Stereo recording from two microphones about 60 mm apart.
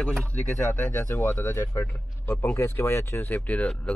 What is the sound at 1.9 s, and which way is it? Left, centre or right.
A man's voice, left.